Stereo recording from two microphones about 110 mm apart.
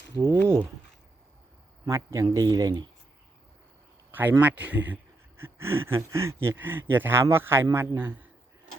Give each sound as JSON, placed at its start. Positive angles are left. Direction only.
{"t": 0.3, "sound": "a sound", "side_deg": 10}
{"t": 1.9, "sound": "speech", "side_deg": -25}
{"t": 4.1, "sound": "speech", "side_deg": -15}